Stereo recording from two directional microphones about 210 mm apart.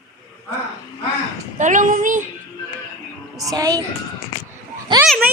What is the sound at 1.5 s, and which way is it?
Speech, 35° right (ahead or behind).